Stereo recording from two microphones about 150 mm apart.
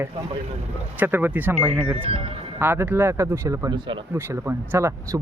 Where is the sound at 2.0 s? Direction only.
40° right (ahead or behind).